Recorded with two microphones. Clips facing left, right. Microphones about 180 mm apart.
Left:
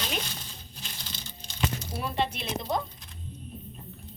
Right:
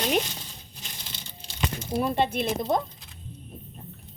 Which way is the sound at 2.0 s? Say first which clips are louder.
Right 6 dB; 50° right (ahead or behind).